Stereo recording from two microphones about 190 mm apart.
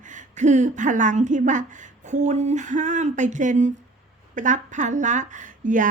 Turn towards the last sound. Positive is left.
turn(degrees=-45)  # may be behind; listen again after turning